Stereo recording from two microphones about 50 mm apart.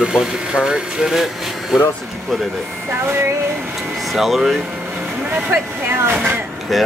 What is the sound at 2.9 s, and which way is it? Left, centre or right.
Speech, right.